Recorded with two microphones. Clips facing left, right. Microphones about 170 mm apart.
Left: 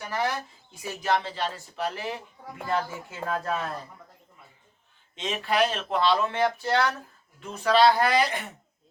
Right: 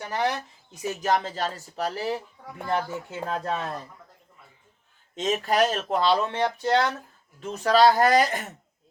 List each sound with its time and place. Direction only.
0.1 s speech: 20° right (ahead or behind)
1.0 s speech: 40° right (ahead or behind)
2.6 s speech: 20° right (ahead or behind)
5.1 s speech: 45° right (ahead or behind)
6.6 s speech: 20° right (ahead or behind)
7.6 s speech: 40° right (ahead or behind)